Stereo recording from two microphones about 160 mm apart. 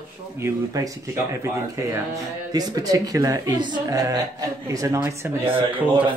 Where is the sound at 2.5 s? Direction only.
25° right (ahead or behind).